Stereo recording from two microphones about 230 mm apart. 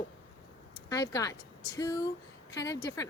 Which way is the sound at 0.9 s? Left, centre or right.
Centre.